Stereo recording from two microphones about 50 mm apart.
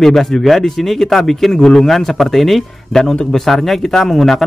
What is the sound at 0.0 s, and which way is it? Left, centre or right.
Speech, centre.